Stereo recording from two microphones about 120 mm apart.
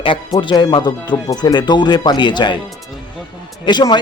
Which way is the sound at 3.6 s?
40° left (ahead or behind).